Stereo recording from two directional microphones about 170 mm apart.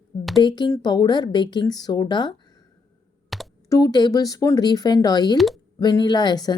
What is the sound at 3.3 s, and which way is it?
Computer keyboard, centre (ahead or behind).